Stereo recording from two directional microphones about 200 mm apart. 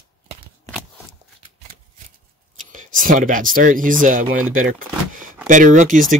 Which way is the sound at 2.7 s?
40° right (ahead or behind).